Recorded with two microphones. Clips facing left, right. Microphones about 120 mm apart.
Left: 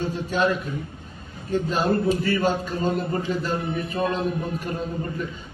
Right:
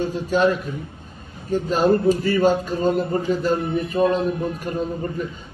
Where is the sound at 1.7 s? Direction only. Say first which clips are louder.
Right 6 dB; 40° right (ahead or behind).